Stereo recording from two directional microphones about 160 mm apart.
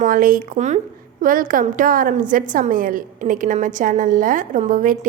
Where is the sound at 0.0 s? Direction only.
60° right (ahead or behind).